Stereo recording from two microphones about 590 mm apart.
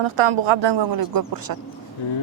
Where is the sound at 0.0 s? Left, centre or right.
Right.